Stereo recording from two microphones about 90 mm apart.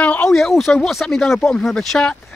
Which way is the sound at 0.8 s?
Centre (ahead or behind).